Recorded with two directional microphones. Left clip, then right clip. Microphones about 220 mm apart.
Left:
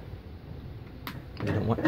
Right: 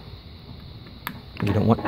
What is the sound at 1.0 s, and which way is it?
Computer keyboard, 45° right (ahead or behind).